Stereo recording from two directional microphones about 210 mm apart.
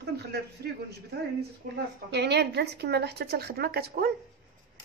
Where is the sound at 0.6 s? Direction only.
50° right (ahead or behind).